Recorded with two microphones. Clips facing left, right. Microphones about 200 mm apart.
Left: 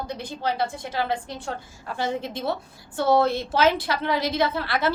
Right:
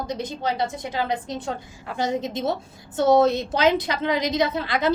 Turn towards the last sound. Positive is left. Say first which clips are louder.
# right 1 dB
turn(degrees=-15)  # may be behind; listen again after turning